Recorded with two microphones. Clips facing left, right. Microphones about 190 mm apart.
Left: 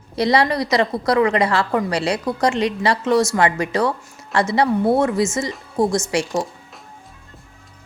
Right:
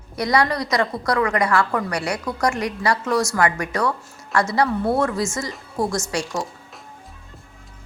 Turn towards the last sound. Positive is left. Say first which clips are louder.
# left 5 dB
turn(degrees=25)  # may be behind; listen again after turning